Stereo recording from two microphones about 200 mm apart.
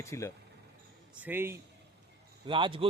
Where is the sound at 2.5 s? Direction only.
25° right (ahead or behind).